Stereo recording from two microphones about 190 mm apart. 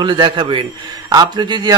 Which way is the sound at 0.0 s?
25° right (ahead or behind).